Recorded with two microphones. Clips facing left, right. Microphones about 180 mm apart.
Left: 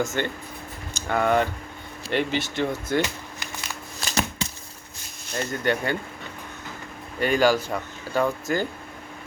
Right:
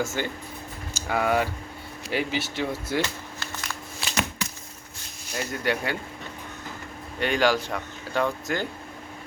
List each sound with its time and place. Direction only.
0.0 s speech: 5° right (ahead or behind)
4.0 s a sound: 35° left (ahead or behind)
5.3 s speech: 5° right (ahead or behind)
7.2 s speech: centre (ahead or behind)